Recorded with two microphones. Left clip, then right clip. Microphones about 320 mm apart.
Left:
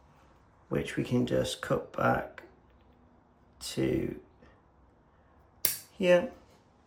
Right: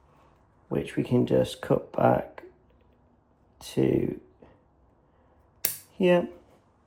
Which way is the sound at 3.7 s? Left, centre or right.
Centre.